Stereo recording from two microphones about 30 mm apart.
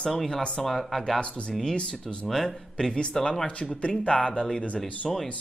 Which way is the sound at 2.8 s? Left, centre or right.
Left.